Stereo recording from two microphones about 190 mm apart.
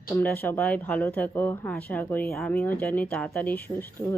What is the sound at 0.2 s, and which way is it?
Speech, 10° left (ahead or behind).